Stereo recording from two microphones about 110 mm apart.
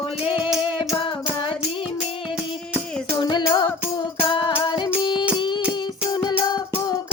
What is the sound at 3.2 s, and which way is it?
Music, 45° left (ahead or behind).